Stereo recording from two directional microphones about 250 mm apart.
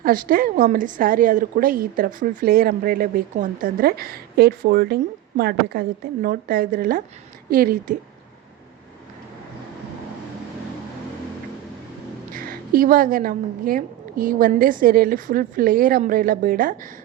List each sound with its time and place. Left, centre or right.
0.0 s a woman's voice: right
12.3 s a woman's voice: right